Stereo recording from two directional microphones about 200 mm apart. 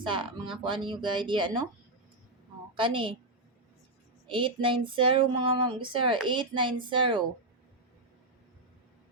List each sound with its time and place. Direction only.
0.0 s speech: 25° right (ahead or behind)
2.7 s speech: 25° right (ahead or behind)
4.3 s speech: 25° right (ahead or behind)